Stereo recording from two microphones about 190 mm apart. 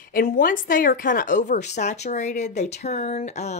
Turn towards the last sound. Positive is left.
turn(degrees=35)  # may be behind; listen again after turning